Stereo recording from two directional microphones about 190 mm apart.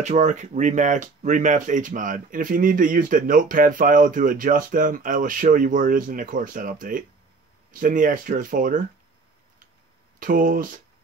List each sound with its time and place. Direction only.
0.0 s speech: 40° right (ahead or behind)
10.1 s speech: 45° right (ahead or behind)